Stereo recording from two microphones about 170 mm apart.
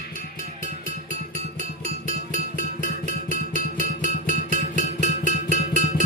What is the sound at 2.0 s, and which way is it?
Music, 50° left (ahead or behind).